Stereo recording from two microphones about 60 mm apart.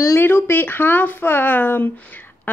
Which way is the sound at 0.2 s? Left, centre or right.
Left.